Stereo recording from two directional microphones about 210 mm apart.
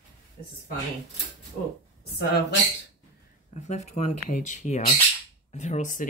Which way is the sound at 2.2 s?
50° left (ahead or behind).